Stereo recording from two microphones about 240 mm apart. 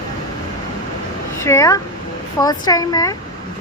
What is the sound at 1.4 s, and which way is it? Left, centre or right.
Speech, centre.